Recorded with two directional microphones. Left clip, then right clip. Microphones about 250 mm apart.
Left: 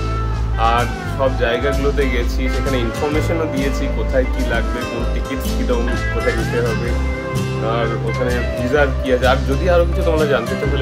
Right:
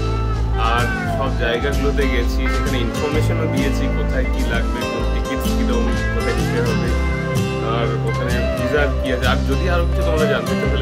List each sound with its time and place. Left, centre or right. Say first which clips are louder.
0.6 s music: left 3 dB; centre
1.4 s speech: left 2 dB; centre
5.6 s speech: left 1 dB; centre